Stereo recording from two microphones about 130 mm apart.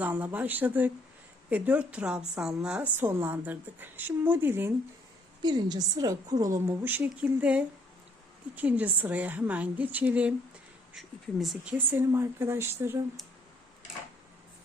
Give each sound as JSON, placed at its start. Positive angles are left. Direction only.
{"t": 0.0, "sound": "a woman's voice", "side_deg": -15}
{"t": 3.0, "sound": "a woman's voice", "side_deg": -20}
{"t": 5.4, "sound": "a woman's voice", "side_deg": -35}
{"t": 11.9, "sound": "a woman's voice", "side_deg": -20}